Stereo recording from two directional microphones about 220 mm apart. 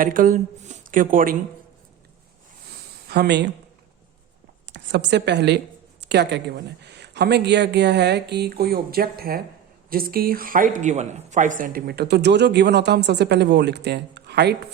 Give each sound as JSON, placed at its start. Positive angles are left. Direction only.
{"t": 0.0, "sound": "speech", "side_deg": -40}
{"t": 3.1, "sound": "speech", "side_deg": -50}
{"t": 4.6, "sound": "a woman's voice", "side_deg": -50}